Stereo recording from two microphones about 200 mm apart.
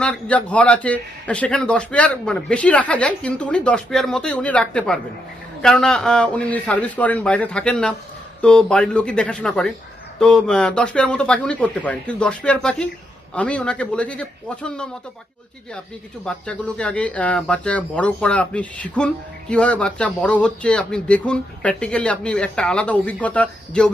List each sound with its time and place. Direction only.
0.0 s a man's voice: 5° left (ahead or behind)
16.2 s speech: 5° left (ahead or behind)